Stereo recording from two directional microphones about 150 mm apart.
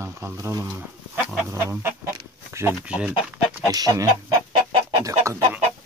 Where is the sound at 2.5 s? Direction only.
20° right (ahead or behind).